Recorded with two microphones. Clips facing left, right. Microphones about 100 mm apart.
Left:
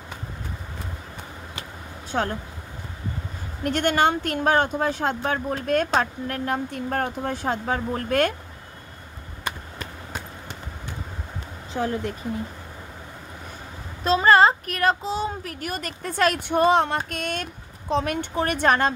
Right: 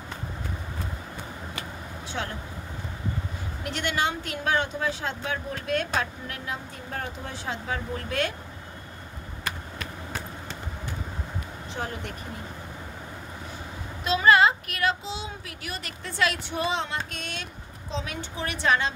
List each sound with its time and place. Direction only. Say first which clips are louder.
2.1 s speech: left 8 dB; 40° left (ahead or behind)
3.6 s speech: left 7 dB; 50° left (ahead or behind)
14.0 s a woman's voice: left 3 dB; 40° left (ahead or behind)